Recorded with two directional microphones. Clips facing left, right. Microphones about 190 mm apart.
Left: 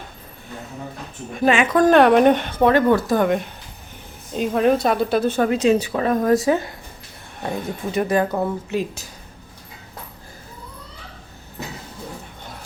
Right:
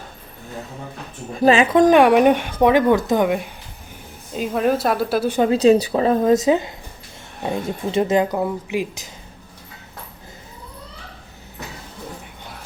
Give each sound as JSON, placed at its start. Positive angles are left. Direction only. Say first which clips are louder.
{"t": 1.3, "sound": "speech", "louder": "right 3 dB", "side_deg": -35}
{"t": 1.7, "sound": "speech", "louder": "left 1 dB", "side_deg": -15}
{"t": 3.2, "sound": "a woman's voice", "louder": "left 1 dB", "side_deg": -5}
{"t": 5.4, "sound": "a woman's voice", "louder": "right 6 dB", "side_deg": -30}